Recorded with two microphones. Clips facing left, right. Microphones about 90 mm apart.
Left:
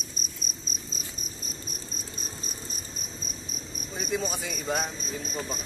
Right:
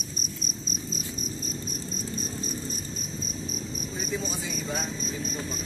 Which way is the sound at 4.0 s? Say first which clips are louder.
Left 3 dB; 50° left (ahead or behind).